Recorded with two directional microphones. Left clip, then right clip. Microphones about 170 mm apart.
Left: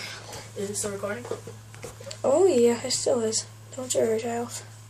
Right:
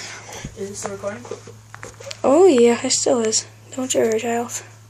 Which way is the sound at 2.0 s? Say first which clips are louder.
Right 7 dB; 55° right (ahead or behind).